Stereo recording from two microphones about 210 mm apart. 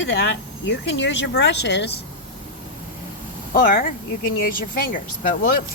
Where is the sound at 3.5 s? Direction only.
45° left (ahead or behind).